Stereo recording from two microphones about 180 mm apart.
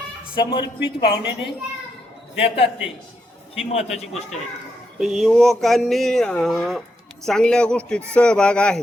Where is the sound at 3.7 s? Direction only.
35° left (ahead or behind).